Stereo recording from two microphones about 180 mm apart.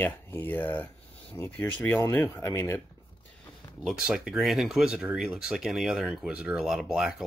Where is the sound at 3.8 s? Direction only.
5° right (ahead or behind).